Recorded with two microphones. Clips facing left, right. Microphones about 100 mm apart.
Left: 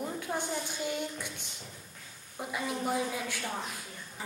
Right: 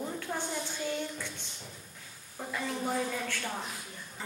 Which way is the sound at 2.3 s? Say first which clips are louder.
Left 1 dB; 15° left (ahead or behind).